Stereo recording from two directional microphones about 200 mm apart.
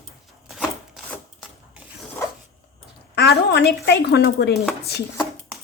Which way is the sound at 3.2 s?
55° left (ahead or behind).